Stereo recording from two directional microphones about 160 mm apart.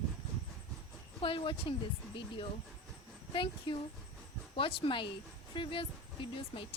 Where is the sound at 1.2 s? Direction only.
35° left (ahead or behind).